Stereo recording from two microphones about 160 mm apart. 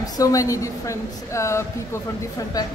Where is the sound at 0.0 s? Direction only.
20° left (ahead or behind).